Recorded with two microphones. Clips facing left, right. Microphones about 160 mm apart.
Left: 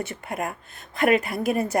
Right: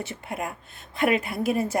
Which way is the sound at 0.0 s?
50° left (ahead or behind).